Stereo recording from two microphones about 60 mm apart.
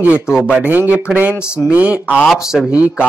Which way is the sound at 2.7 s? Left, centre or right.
Centre.